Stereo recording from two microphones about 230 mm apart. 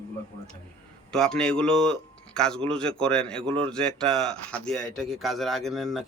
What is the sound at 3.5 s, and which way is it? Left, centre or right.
Speech, right.